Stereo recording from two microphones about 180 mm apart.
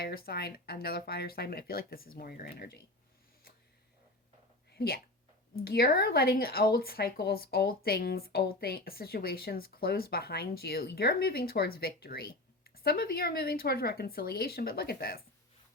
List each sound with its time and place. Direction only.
0.0 s speech: 60° left (ahead or behind)
4.7 s a sound: 60° left (ahead or behind)
5.6 s speech: 60° left (ahead or behind)